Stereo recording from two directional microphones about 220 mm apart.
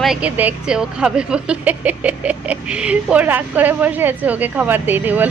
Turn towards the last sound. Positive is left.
turn(degrees=-10)  # may be behind; listen again after turning